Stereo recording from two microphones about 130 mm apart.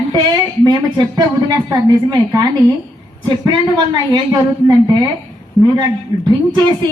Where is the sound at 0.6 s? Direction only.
35° right (ahead or behind).